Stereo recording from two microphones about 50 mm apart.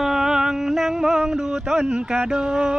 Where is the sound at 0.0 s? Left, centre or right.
Centre.